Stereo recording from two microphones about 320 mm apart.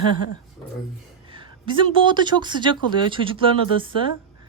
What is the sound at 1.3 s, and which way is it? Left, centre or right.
Speech, centre.